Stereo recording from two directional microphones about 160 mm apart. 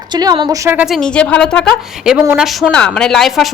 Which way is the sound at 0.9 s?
5° left (ahead or behind).